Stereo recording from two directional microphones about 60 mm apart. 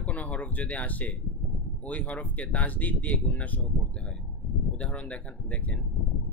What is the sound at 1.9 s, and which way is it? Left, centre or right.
Speech, left.